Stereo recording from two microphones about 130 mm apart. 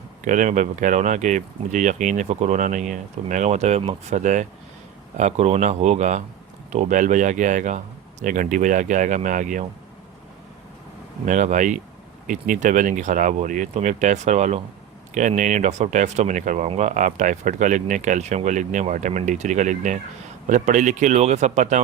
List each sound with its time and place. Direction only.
0.3 s a man's voice: 80° right
8.2 s speech: 90° right
11.3 s speech: 70° right (ahead or behind)
16.6 s speech: 65° right (ahead or behind)